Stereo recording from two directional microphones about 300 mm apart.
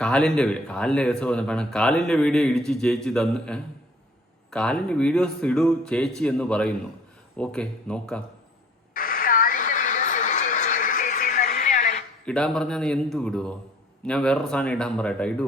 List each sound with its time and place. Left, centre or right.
0.0 s speech: centre
8.9 s radio: left
12.2 s speech: centre